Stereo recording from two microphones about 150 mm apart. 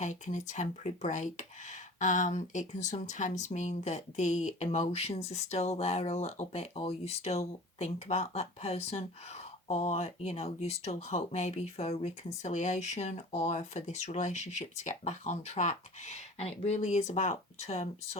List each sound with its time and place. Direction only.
0.0 s speech: 55° left (ahead or behind)